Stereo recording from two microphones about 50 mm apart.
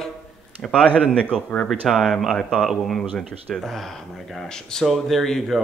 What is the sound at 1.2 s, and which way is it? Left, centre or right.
Speech, left.